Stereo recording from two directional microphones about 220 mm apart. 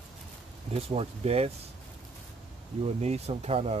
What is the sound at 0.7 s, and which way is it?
Speech, 25° right (ahead or behind).